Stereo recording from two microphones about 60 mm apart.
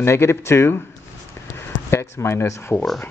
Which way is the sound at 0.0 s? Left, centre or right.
Left.